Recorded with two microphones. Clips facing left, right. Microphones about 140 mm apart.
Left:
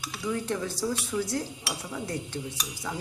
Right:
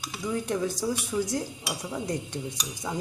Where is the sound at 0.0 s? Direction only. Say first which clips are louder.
Even; 15° right (ahead or behind).